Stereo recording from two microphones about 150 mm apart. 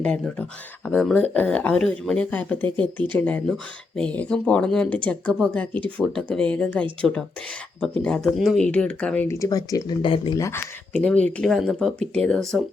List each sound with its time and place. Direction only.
0.0 s speech: 5° left (ahead or behind)
9.2 s speech: 20° left (ahead or behind)
10.3 s speech: 20° left (ahead or behind)
10.9 s speech: 10° left (ahead or behind)